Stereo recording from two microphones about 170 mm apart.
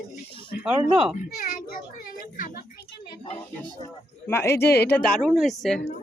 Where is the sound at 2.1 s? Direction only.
55° left (ahead or behind).